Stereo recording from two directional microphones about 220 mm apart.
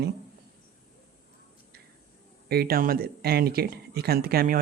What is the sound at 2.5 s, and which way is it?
Speech, 45° right (ahead or behind).